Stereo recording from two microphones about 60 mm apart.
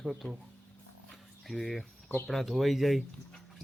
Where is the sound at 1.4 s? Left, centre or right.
Centre.